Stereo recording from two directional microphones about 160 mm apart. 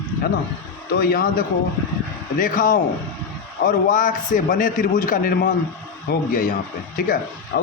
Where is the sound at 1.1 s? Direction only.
65° left (ahead or behind).